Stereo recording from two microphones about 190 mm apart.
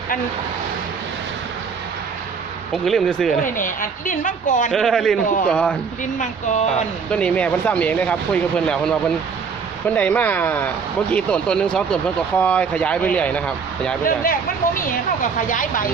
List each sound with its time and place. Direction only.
2.7 s speech: centre (ahead or behind)
3.4 s a woman's voice: 45° left (ahead or behind)
4.7 s speech: centre (ahead or behind)
6.1 s speech: 40° left (ahead or behind)
7.1 s speech: 5° left (ahead or behind)
14.8 s a woman's voice: 45° left (ahead or behind)